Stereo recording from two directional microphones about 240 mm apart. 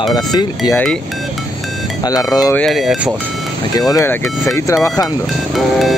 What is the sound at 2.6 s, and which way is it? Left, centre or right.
Speech, centre.